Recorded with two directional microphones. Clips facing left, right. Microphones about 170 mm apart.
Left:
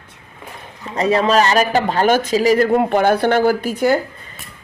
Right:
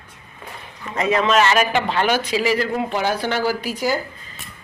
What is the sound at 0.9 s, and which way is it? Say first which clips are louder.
A man's voice: left 3 dB; 35° left (ahead or behind).